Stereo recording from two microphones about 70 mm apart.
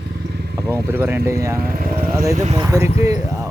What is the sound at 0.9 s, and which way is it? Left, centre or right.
Speech, right.